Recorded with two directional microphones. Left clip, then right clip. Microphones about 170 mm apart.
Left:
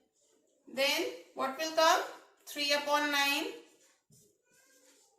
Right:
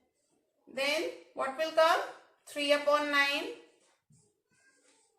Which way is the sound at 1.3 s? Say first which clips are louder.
Right 3 dB; 25° right (ahead or behind).